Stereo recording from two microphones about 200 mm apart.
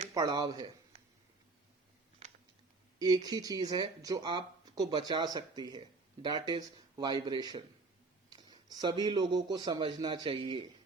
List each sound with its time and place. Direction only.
0.1 s speech: 20° right (ahead or behind)
3.0 s speech: 20° right (ahead or behind)